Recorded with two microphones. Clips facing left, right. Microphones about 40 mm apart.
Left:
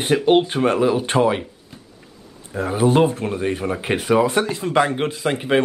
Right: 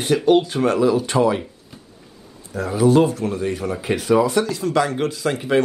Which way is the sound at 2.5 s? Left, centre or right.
Left.